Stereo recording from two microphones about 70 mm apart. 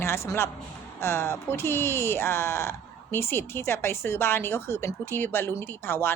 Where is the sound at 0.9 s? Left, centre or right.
Left.